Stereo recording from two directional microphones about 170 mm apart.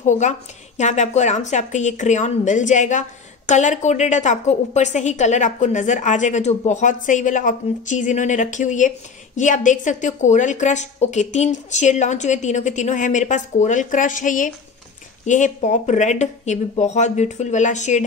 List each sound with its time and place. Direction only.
0.0 s a woman's voice: 45° left (ahead or behind)